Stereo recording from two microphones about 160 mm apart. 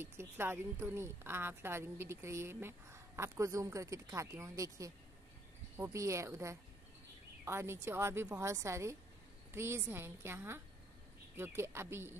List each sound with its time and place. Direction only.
0.0 s a woman's voice: 15° right (ahead or behind)